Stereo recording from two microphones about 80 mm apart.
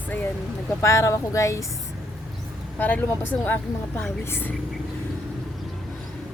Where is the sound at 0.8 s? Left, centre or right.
Left.